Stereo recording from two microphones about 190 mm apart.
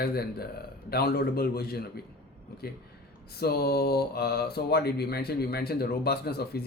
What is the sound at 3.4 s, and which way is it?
Speech, 55° left (ahead or behind).